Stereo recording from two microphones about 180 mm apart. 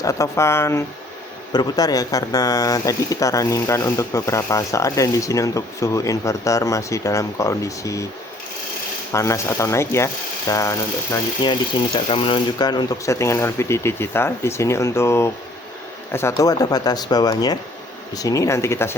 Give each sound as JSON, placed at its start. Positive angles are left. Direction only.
{"t": 0.0, "sound": "speech", "side_deg": 20}
{"t": 9.1, "sound": "speech", "side_deg": 15}
{"t": 11.9, "sound": "speech", "side_deg": 30}